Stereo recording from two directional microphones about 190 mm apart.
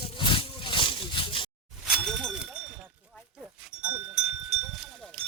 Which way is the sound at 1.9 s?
Centre (ahead or behind).